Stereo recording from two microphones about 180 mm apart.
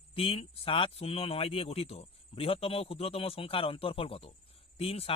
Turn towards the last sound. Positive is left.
turn(degrees=30)  # may be behind; listen again after turning